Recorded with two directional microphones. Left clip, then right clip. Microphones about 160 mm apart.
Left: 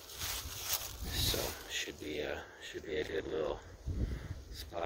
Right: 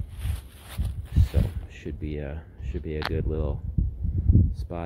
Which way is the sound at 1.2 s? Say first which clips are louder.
Left 1 dB; 10° left (ahead or behind).